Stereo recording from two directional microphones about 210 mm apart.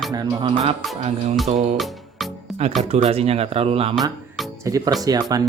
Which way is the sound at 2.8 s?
30° right (ahead or behind).